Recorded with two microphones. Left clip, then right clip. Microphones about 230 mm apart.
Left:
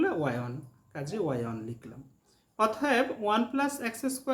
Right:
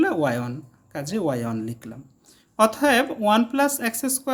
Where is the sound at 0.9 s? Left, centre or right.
Right.